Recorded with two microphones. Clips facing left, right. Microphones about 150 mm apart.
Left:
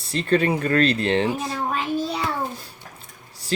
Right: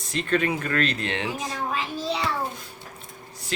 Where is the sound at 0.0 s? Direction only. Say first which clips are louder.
Left 4 dB; 35° left (ahead or behind).